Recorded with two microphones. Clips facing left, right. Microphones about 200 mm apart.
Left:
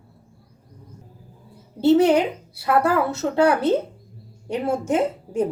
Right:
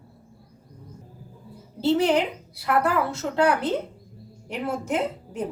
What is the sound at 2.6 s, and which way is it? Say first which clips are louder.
A woman's voice: left 3 dB; 25° left (ahead or behind).